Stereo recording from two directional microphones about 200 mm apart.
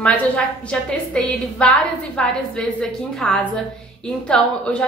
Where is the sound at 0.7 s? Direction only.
5° left (ahead or behind).